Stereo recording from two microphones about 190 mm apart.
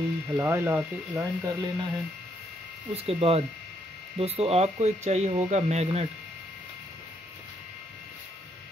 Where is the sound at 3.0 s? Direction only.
30° right (ahead or behind).